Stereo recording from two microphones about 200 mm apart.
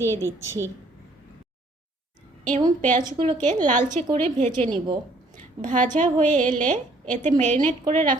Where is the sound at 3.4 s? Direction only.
35° right (ahead or behind).